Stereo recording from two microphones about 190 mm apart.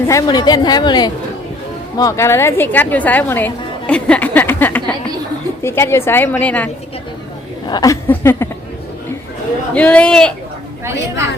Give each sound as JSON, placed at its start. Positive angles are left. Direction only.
{"t": 0.1, "sound": "a woman's voice", "side_deg": 20}
{"t": 7.7, "sound": "a woman's voice", "side_deg": 20}
{"t": 9.7, "sound": "a man's voice", "side_deg": 5}